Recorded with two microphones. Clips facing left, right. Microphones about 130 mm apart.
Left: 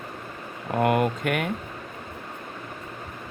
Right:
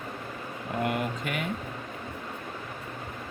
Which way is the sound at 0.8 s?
55° left (ahead or behind).